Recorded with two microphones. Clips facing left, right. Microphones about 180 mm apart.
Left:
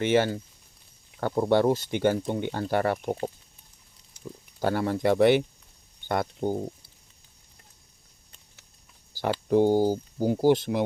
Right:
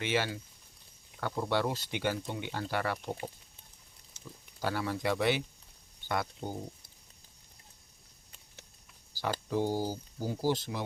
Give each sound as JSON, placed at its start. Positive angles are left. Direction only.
{"t": 0.0, "sound": "speech", "side_deg": 50}
{"t": 4.6, "sound": "speech", "side_deg": 50}
{"t": 9.1, "sound": "speech", "side_deg": 55}